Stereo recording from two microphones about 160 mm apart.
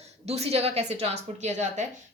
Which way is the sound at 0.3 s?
40° right (ahead or behind).